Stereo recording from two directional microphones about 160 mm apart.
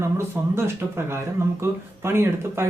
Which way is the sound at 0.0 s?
15° right (ahead or behind).